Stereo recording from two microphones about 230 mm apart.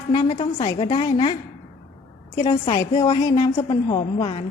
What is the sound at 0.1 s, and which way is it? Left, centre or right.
A woman's voice, centre.